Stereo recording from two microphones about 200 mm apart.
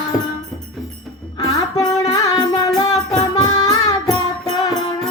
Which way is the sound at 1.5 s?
20° left (ahead or behind).